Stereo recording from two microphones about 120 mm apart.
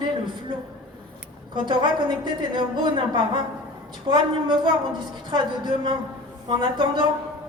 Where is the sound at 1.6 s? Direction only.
40° right (ahead or behind).